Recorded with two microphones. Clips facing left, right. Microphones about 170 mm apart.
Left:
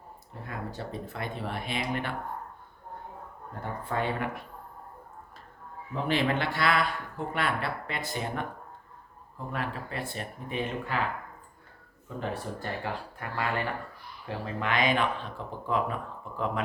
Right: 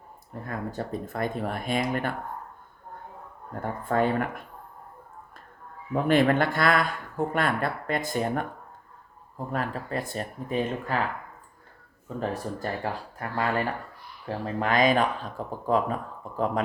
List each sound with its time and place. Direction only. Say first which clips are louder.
0.4 s speech: right 4 dB; 45° right (ahead or behind)
3.5 s speech: right 6 dB; 45° right (ahead or behind)
5.9 s speech: right 6 dB; 50° right (ahead or behind)
9.5 s speech: right 4 dB; 40° right (ahead or behind)
12.3 s speech: right 3 dB; 40° right (ahead or behind)